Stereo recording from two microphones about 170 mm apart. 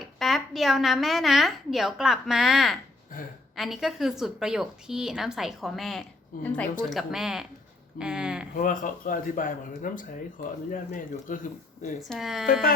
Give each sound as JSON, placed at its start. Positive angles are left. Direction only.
{"t": 0.0, "sound": "a woman's voice", "side_deg": 0}
{"t": 8.5, "sound": "speech", "side_deg": 50}
{"t": 12.0, "sound": "a woman's voice", "side_deg": 0}